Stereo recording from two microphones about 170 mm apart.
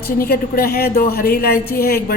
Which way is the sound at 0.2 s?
65° left (ahead or behind).